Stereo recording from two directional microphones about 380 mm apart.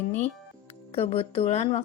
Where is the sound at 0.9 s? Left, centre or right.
Centre.